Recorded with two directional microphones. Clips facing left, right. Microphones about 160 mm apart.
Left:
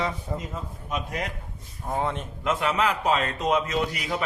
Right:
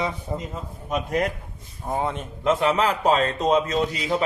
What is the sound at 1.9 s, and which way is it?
Speech, 15° right (ahead or behind).